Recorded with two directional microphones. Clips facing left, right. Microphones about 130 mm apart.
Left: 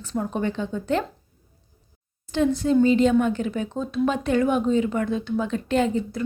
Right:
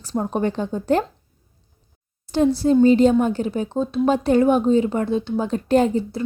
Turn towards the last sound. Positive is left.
turn(degrees=-30)  # may be behind; listen again after turning